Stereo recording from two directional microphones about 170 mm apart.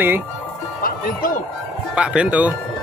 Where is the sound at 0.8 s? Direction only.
55° left (ahead or behind).